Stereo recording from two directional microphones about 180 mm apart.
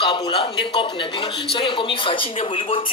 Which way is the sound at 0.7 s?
30° left (ahead or behind).